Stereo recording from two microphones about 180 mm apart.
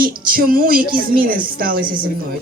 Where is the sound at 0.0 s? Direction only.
50° right (ahead or behind).